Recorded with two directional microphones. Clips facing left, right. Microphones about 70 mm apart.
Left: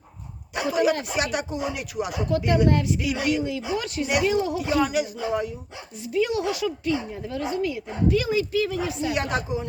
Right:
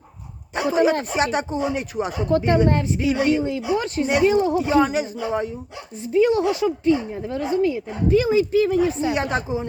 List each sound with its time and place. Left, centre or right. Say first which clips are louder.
0.5 s speech: right 4 dB; right
6.1 s speech: right 6 dB; right